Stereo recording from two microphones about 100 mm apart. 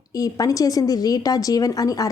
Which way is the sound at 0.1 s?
40° left (ahead or behind).